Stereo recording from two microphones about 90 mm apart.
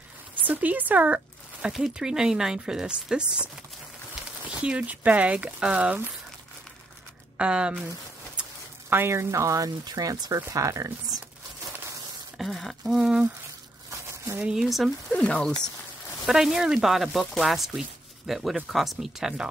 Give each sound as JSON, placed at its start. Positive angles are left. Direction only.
{"t": 0.5, "sound": "speech", "side_deg": -20}
{"t": 1.7, "sound": "speech", "side_deg": -5}
{"t": 4.5, "sound": "speech", "side_deg": -10}
{"t": 7.3, "sound": "speech", "side_deg": -10}
{"t": 8.9, "sound": "speech", "side_deg": -25}
{"t": 12.4, "sound": "speech", "side_deg": 0}
{"t": 13.8, "sound": "a sound", "side_deg": -30}
{"t": 14.4, "sound": "speech", "side_deg": -5}
{"t": 15.2, "sound": "speech", "side_deg": 10}
{"t": 16.3, "sound": "speech", "side_deg": -5}